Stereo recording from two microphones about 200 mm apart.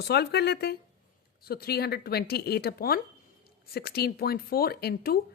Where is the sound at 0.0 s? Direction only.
55° left (ahead or behind).